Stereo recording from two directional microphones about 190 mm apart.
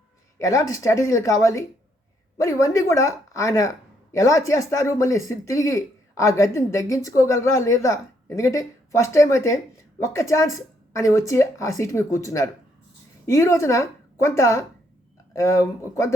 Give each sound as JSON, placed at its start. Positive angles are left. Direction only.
{"t": 0.3, "sound": "a woman's voice", "side_deg": 15}